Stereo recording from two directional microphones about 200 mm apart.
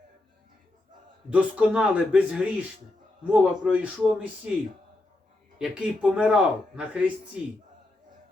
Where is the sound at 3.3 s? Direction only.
5° right (ahead or behind).